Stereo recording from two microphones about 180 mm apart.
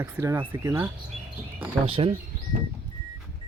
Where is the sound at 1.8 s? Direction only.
30° right (ahead or behind).